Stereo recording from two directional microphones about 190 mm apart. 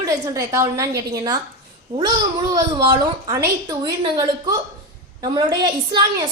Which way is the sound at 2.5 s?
20° right (ahead or behind).